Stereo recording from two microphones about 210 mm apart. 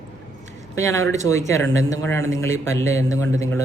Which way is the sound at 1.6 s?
65° right (ahead or behind).